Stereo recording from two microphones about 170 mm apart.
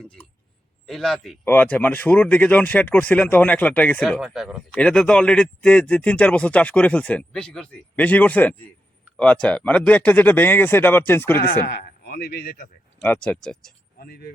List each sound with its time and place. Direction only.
0.9 s speech: centre (ahead or behind)
11.6 s a man's voice: 60° left (ahead or behind)
13.0 s speech: 10° left (ahead or behind)
14.0 s speech: 70° left (ahead or behind)